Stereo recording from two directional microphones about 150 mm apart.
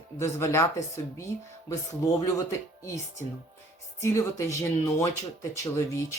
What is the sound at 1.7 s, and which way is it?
Speech, 20° left (ahead or behind).